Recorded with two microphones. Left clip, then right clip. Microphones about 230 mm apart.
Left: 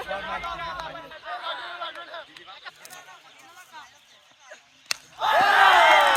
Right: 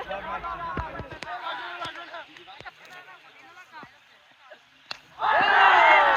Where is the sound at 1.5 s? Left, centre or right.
Left.